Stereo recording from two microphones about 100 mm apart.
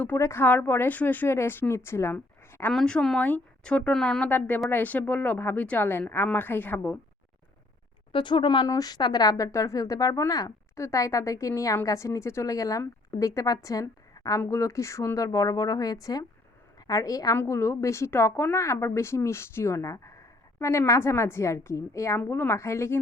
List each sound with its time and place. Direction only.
0.2 s a woman's voice: 25° left (ahead or behind)
2.7 s speech: 5° left (ahead or behind)
4.3 s a woman's voice: 15° left (ahead or behind)
8.1 s speech: 55° left (ahead or behind)
8.6 s a woman's voice: 40° left (ahead or behind)
9.3 s a woman's voice: 30° left (ahead or behind)
17.3 s a woman's voice: 25° left (ahead or behind)